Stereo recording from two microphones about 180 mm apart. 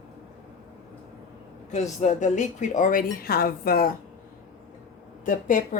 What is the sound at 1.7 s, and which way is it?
A woman's voice, 40° left (ahead or behind).